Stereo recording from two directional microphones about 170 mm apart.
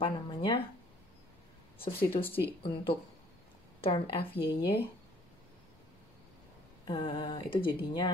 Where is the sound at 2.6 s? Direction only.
30° left (ahead or behind).